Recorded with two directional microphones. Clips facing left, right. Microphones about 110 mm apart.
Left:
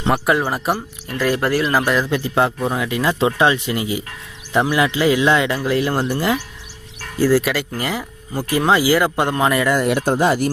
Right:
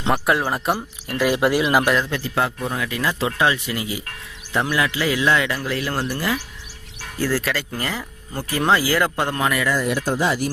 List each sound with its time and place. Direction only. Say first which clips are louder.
0.1 s speech: left 2 dB; centre (ahead or behind)
1.1 s speech: even; 15° right (ahead or behind)
2.0 s speech: left 5 dB; 20° left (ahead or behind)
9.4 s speech: left 5 dB; 35° left (ahead or behind)
9.6 s speech: left 4 dB; 65° left (ahead or behind); by 10.5 s 50° left (ahead or behind)